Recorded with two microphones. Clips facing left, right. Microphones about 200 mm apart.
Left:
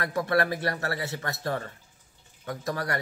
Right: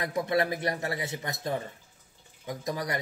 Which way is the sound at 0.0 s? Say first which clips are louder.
Left 1 dB; 20° right (ahead or behind).